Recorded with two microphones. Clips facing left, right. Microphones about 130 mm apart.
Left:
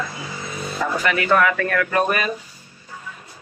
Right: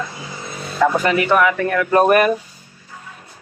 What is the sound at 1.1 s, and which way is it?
Speech, 20° right (ahead or behind).